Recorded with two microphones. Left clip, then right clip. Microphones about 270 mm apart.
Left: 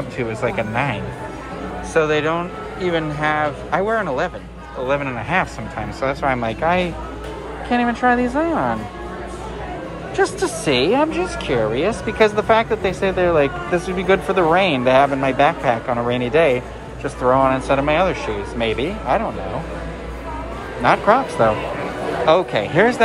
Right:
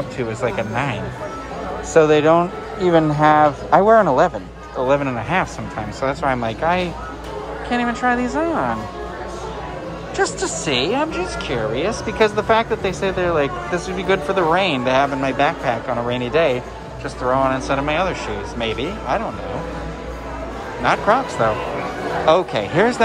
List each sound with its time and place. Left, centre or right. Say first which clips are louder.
0.2 s speech: left 1 dB; centre
2.0 s speech: right 5 dB; centre
10.1 s speech: left 2 dB; centre
20.8 s speech: left 2 dB; centre